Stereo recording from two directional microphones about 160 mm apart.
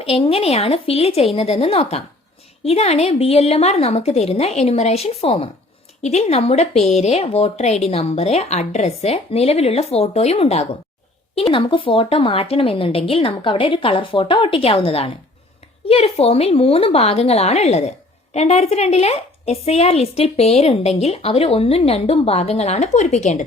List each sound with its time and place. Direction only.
0.0 s a woman's voice: 35° left (ahead or behind)